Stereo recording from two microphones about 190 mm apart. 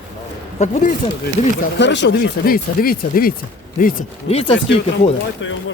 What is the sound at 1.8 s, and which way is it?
Speech, 70° left (ahead or behind).